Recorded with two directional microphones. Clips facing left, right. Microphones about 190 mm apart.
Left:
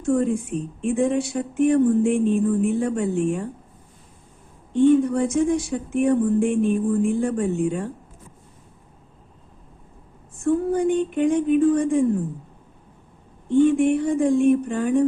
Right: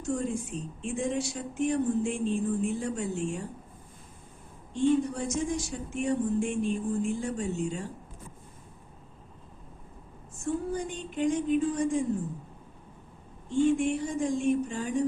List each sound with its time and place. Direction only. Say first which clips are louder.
0.0 s speech: left 10 dB; 55° left (ahead or behind)
4.7 s speech: left 9 dB; 60° left (ahead or behind)
10.4 s speech: left 11 dB; 55° left (ahead or behind)
13.5 s speech: left 8 dB; 55° left (ahead or behind)